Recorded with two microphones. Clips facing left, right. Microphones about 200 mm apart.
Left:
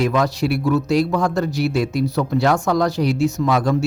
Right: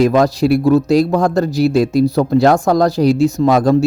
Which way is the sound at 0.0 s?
35° right (ahead or behind).